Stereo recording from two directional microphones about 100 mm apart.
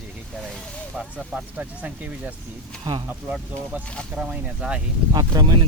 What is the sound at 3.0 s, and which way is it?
Speech, 15° right (ahead or behind).